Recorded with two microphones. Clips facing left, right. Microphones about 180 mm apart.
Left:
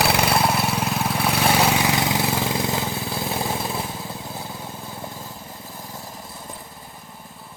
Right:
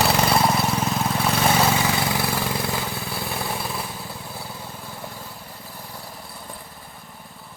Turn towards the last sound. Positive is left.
turn(degrees=20)  # may be behind; listen again after turning